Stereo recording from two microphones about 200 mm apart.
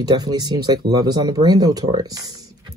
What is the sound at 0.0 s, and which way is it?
Speech, 20° right (ahead or behind).